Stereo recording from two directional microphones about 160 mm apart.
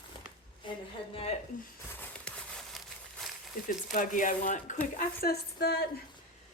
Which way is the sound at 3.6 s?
55° left (ahead or behind).